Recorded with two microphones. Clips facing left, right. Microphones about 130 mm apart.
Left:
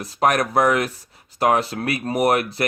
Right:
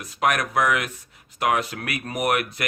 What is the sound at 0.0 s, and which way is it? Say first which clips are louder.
Speech: left 4 dB; 35° left (ahead or behind).